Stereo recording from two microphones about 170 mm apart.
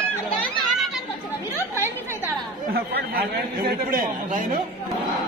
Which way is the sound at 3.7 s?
55° right (ahead or behind).